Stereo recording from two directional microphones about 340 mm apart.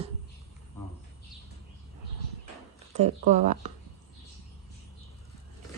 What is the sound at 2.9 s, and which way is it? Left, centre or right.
Speech, centre.